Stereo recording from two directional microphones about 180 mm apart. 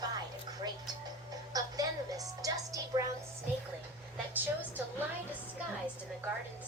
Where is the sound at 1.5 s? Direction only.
20° right (ahead or behind).